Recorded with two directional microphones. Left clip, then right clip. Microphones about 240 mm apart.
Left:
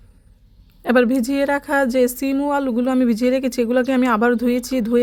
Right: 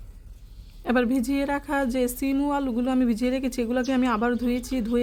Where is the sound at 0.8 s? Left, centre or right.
Left.